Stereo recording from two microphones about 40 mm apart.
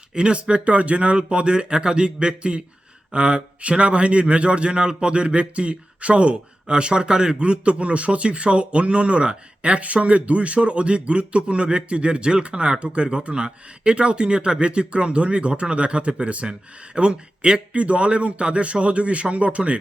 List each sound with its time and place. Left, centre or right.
0.1 s speech: right